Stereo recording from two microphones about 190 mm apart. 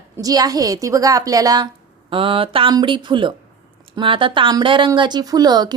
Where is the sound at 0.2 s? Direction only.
20° right (ahead or behind).